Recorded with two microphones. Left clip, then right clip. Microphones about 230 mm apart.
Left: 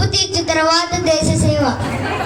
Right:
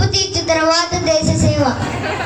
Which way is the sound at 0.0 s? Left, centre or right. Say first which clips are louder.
Even; left.